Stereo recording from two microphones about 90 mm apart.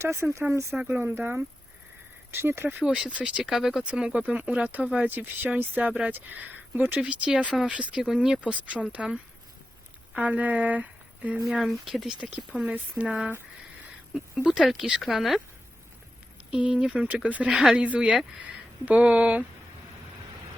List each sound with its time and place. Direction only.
0.0 s speech: 30° right (ahead or behind)
2.8 s speech: 10° right (ahead or behind)
10.2 s speech: 15° right (ahead or behind)
11.5 s speech: centre (ahead or behind)
16.5 s speech: 10° right (ahead or behind)
17.5 s speech: 5° right (ahead or behind)